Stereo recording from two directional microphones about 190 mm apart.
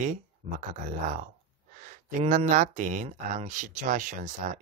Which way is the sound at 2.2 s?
40° right (ahead or behind).